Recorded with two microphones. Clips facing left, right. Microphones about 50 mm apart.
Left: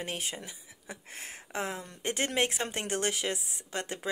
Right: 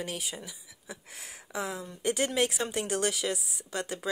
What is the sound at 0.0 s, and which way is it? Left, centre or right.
Speech, left.